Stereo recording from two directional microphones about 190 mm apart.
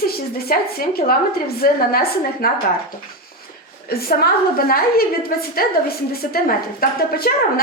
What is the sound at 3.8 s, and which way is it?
A woman's voice, 55° left (ahead or behind).